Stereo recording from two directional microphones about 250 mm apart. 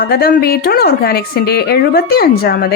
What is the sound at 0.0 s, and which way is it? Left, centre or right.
A woman's voice, left.